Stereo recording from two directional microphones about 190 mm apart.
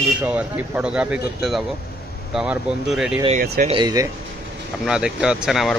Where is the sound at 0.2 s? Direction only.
5° right (ahead or behind).